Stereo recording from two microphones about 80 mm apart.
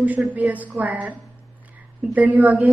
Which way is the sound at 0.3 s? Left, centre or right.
Centre.